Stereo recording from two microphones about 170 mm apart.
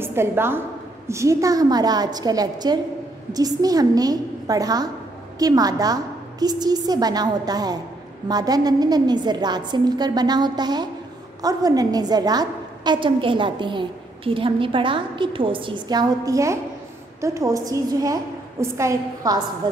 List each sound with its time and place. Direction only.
0.0 s a woman's voice: 15° right (ahead or behind)